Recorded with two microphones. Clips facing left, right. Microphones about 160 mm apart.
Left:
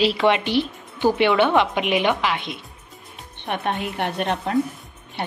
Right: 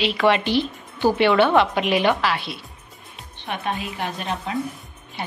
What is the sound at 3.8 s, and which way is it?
Speech, 65° left (ahead or behind).